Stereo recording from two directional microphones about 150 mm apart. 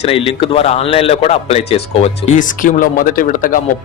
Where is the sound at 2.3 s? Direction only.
60° left (ahead or behind).